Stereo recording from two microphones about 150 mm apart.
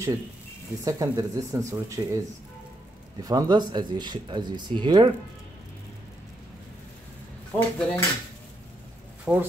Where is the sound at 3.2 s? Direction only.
25° right (ahead or behind).